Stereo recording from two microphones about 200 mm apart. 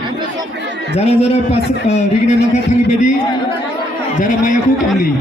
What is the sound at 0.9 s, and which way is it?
Speech, 30° left (ahead or behind).